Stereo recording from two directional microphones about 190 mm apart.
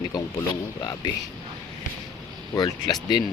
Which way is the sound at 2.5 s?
20° left (ahead or behind).